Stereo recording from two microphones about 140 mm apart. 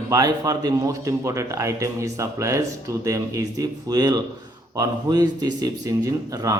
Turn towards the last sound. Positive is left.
turn(degrees=-25)  # may be behind; listen again after turning